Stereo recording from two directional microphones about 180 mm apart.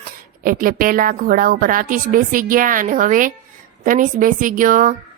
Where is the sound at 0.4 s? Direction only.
50° right (ahead or behind).